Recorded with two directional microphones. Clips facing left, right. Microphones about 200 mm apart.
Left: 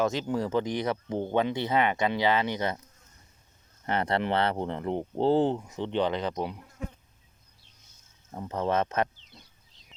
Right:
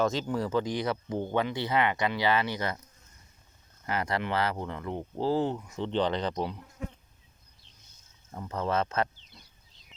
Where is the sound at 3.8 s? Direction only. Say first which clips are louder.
Left 3 dB; 30° left (ahead or behind); by 6.5 s 5° left (ahead or behind).